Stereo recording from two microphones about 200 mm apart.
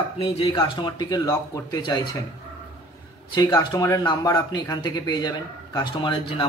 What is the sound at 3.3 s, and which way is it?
Speech, 20° left (ahead or behind).